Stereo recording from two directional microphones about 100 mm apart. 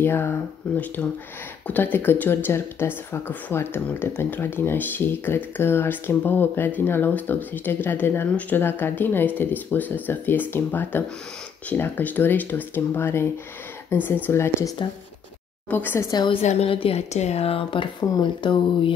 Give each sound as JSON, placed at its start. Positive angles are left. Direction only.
{"t": 0.0, "sound": "speech", "side_deg": 25}
{"t": 15.7, "sound": "speech", "side_deg": 20}
{"t": 16.3, "sound": "speech", "side_deg": 65}